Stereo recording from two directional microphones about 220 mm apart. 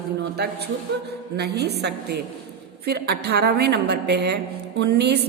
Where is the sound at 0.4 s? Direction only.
45° right (ahead or behind).